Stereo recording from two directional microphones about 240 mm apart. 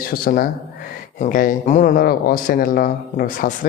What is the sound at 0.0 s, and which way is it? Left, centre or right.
Speech, left.